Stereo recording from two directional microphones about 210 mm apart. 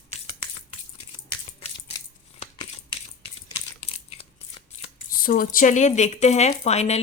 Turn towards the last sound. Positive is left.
turn(degrees=30)  # may be behind; listen again after turning